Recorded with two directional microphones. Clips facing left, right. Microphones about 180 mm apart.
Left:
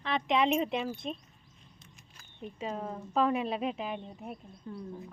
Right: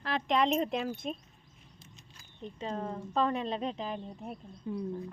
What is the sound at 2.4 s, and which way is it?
A woman's voice, 10° left (ahead or behind).